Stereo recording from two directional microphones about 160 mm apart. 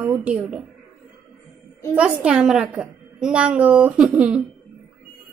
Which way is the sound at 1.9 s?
5° right (ahead or behind).